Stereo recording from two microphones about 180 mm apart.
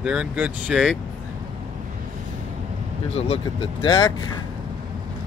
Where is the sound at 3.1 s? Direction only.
35° left (ahead or behind).